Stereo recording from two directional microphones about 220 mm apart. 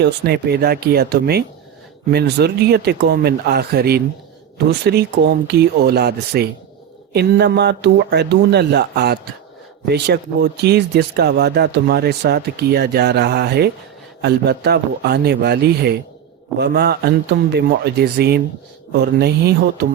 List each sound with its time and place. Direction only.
0.0 s speech: 45° right (ahead or behind)